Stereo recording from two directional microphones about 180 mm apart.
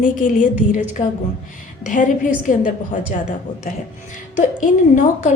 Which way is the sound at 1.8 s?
45° left (ahead or behind).